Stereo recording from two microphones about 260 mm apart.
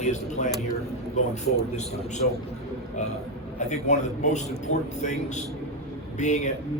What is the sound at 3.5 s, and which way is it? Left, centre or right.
A man's voice, left.